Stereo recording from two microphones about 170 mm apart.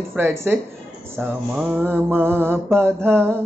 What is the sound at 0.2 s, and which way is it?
Speech, 10° right (ahead or behind).